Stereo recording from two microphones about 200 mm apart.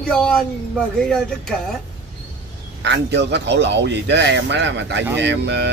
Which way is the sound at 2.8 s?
60° right (ahead or behind).